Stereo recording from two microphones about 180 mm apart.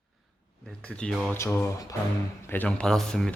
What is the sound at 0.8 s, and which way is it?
Speech, 5° left (ahead or behind).